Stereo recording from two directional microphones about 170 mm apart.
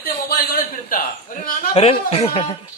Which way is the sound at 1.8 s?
35° left (ahead or behind).